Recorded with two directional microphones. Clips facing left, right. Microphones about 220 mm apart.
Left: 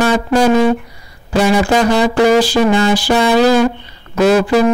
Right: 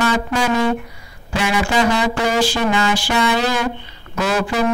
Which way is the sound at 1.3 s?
40° left (ahead or behind).